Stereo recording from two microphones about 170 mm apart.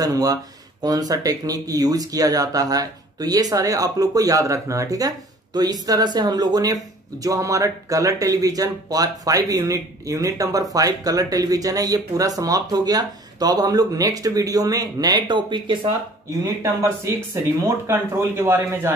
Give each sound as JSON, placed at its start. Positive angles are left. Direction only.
{"t": 0.0, "sound": "speech", "side_deg": -20}